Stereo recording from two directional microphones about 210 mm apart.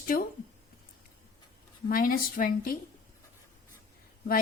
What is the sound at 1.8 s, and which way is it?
Speech, 40° left (ahead or behind).